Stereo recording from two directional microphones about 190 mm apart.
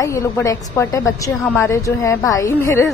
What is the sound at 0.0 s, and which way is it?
A woman's voice, 15° left (ahead or behind).